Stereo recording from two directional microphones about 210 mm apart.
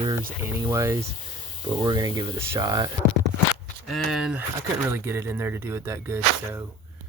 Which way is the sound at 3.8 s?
Centre (ahead or behind).